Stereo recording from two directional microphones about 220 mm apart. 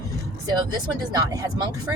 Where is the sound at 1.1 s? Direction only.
15° right (ahead or behind).